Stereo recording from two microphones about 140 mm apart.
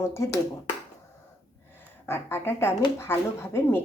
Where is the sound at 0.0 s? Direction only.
20° left (ahead or behind).